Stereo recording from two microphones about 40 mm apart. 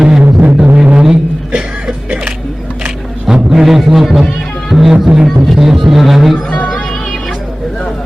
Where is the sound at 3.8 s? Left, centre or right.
Centre.